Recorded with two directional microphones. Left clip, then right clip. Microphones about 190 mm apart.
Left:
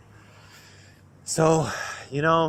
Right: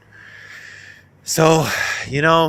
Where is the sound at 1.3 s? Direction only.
25° right (ahead or behind).